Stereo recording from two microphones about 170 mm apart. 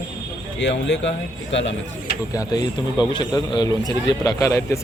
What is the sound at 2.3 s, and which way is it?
A man's voice, 25° left (ahead or behind).